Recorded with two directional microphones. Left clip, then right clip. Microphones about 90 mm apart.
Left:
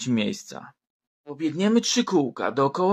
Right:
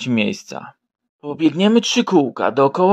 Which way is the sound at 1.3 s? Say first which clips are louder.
Right 8 dB; 50° right (ahead or behind).